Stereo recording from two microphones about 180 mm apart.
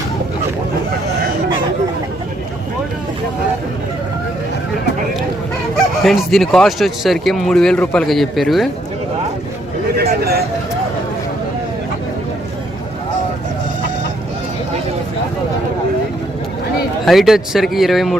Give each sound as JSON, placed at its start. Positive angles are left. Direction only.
{"t": 6.0, "sound": "speech", "side_deg": 0}
{"t": 10.0, "sound": "a sound", "side_deg": -65}
{"t": 17.1, "sound": "speech", "side_deg": 0}